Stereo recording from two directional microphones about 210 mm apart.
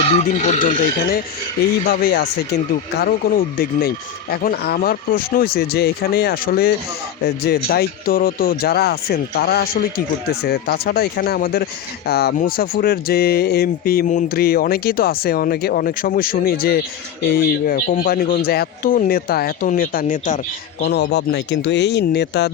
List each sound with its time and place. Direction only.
0.0 s a man's voice: 30° left (ahead or behind)
1.9 s speech: 45° left (ahead or behind)
20.8 s speech: 50° left (ahead or behind)